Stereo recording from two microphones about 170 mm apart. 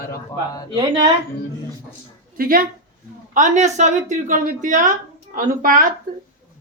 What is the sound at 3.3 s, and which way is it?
A woman's voice, 45° right (ahead or behind).